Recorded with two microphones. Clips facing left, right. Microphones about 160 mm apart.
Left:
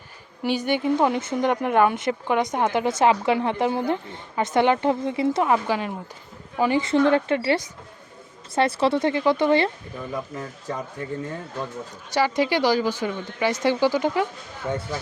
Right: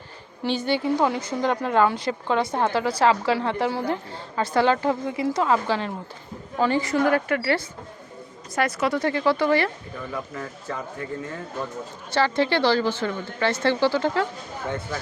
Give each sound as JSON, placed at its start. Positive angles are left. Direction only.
{"t": 0.4, "sound": "a woman's voice", "side_deg": 15}
{"t": 6.8, "sound": "a woman's voice", "side_deg": 25}
{"t": 12.1, "sound": "speech", "side_deg": 10}